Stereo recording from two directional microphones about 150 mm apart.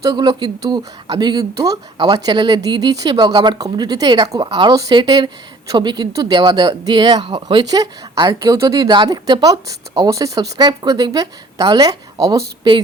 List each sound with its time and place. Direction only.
0.0 s speech: 25° right (ahead or behind)